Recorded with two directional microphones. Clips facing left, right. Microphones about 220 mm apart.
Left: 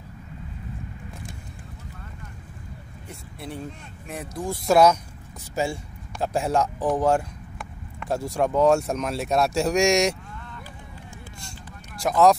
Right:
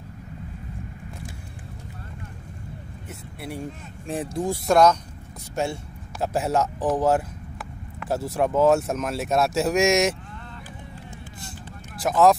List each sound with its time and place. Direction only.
3.3 s speech: 10° right (ahead or behind)
4.1 s speech: 30° right (ahead or behind)
4.6 s speech: 5° left (ahead or behind)
12.0 s speech: centre (ahead or behind)